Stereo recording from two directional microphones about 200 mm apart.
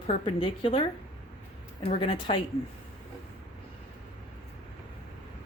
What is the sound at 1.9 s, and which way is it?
Speech, 25° left (ahead or behind).